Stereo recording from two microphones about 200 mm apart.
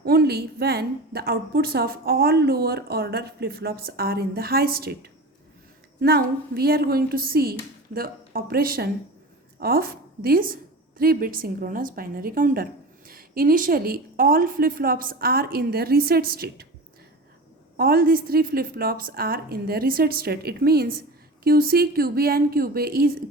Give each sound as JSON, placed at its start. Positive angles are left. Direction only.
{"t": 0.0, "sound": "a woman's voice", "side_deg": -50}
{"t": 17.7, "sound": "a woman's voice", "side_deg": -50}